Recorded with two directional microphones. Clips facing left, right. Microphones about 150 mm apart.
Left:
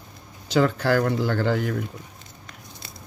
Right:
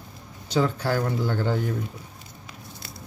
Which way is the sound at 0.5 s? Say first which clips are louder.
Left 4 dB; 75° left (ahead or behind).